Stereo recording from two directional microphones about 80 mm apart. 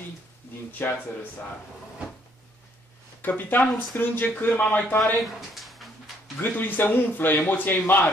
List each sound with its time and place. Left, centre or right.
0.7 s a man's voice: left
3.2 s a man's voice: left
5.5 s a sound: centre
6.4 s a man's voice: left